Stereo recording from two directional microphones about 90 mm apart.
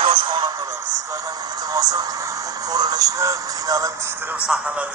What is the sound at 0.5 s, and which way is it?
Speech, 40° right (ahead or behind).